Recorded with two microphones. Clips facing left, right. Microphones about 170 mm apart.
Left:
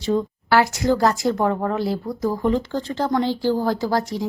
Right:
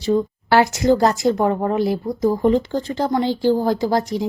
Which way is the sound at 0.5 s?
25° right (ahead or behind).